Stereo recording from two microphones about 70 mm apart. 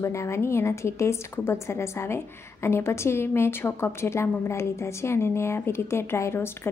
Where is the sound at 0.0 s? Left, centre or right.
Left.